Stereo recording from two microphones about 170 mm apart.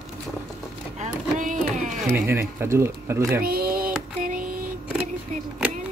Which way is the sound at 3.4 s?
60° right (ahead or behind).